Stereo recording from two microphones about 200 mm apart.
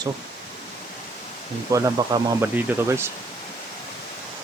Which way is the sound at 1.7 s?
15° right (ahead or behind).